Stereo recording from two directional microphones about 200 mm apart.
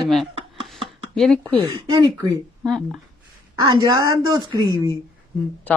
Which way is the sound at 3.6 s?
20° right (ahead or behind).